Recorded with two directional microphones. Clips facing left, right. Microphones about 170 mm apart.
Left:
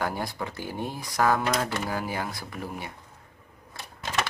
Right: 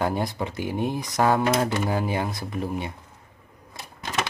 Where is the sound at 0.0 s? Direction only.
20° right (ahead or behind).